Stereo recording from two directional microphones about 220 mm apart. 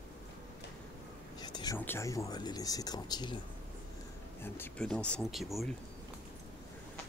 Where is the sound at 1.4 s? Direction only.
20° left (ahead or behind).